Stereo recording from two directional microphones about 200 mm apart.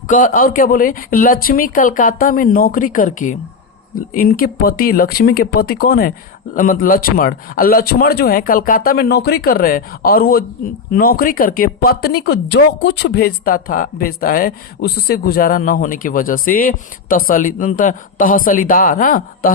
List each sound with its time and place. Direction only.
0.1 s speech: 40° left (ahead or behind)